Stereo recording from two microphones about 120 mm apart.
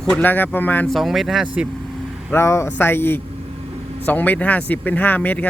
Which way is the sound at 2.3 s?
20° left (ahead or behind).